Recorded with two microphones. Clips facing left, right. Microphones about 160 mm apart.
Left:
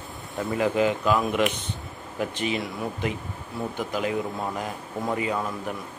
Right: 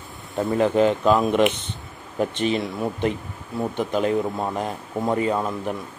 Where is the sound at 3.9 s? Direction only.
30° right (ahead or behind).